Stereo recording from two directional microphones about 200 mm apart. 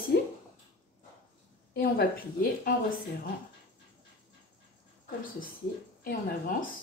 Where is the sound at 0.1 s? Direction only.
55° left (ahead or behind).